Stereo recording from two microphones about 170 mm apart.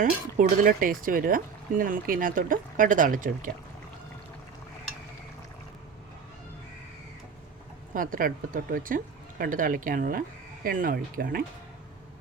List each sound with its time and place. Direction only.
0.0 s speech: 50° right (ahead or behind)
7.9 s speech: 55° right (ahead or behind)